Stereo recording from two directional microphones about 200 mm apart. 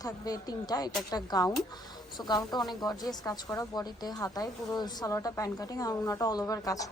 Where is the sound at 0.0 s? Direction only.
20° left (ahead or behind).